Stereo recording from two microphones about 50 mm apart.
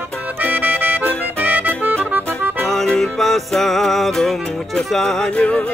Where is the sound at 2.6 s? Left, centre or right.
Centre.